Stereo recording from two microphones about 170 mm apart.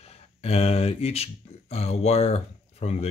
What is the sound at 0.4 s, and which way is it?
Speech, 35° left (ahead or behind).